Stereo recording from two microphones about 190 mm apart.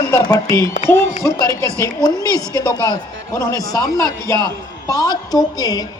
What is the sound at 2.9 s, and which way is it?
Speech, 20° left (ahead or behind).